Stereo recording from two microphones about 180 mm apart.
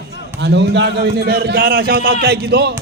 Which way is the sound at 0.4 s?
70° right (ahead or behind).